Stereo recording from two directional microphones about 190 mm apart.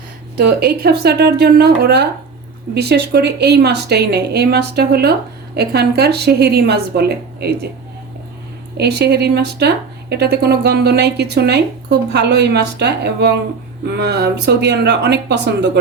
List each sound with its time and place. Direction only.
0.3 s speech: 55° right (ahead or behind)
8.8 s speech: 60° right (ahead or behind)